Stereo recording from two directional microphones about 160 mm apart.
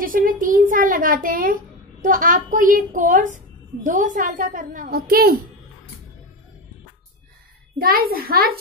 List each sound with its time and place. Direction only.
0.0 s a child's voice: 60° right (ahead or behind)
7.8 s a child's voice: 70° right (ahead or behind)